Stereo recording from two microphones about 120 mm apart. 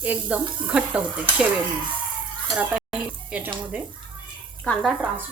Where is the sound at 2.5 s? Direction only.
10° right (ahead or behind).